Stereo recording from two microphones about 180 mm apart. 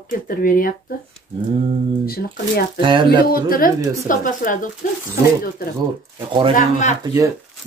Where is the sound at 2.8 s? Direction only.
25° right (ahead or behind).